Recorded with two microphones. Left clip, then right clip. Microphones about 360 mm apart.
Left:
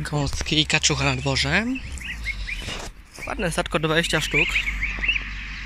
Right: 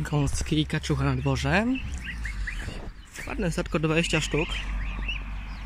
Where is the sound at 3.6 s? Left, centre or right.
Centre.